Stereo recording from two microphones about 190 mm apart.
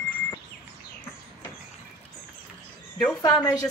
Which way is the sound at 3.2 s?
15° left (ahead or behind).